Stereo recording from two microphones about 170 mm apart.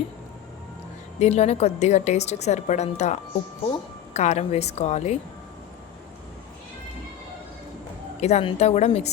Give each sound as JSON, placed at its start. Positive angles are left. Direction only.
{"t": 1.2, "sound": "a woman's voice", "side_deg": 40}
{"t": 8.2, "sound": "a woman's voice", "side_deg": 40}